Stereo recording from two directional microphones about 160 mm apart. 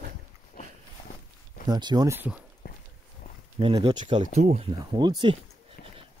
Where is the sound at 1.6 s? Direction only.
25° right (ahead or behind).